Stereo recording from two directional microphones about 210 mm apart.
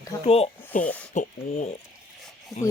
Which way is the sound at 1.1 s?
35° left (ahead or behind).